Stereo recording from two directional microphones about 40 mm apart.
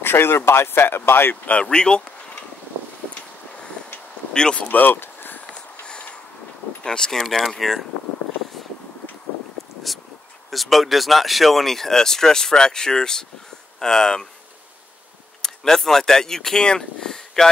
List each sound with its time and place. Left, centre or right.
0.0 s speech: left
1.3 s speech: left
1.6 s speech: left
4.3 s speech: centre
4.6 s speech: left
5.0 s a sound: left
5.5 s a sound: left
6.8 s speech: centre
7.2 s speech: centre
9.9 s a sound: centre
10.5 s speech: centre
15.4 s speech: centre
16.6 s speech: left